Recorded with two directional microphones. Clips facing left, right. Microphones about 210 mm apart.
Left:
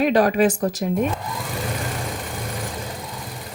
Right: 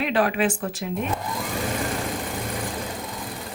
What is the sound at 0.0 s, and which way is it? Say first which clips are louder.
Speech: left 5 dB; 40° left (ahead or behind).